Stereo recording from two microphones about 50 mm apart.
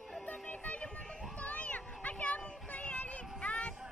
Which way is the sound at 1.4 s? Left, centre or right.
Left.